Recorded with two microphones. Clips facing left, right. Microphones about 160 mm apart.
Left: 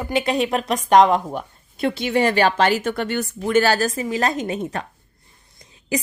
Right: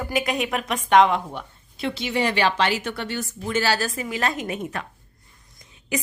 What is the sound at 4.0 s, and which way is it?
A woman's voice, 35° left (ahead or behind).